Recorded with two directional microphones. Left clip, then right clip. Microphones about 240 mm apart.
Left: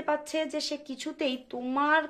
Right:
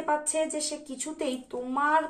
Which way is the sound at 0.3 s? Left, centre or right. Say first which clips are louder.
Right 1 dB; left.